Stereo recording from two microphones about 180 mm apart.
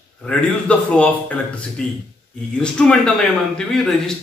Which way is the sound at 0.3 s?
5° left (ahead or behind).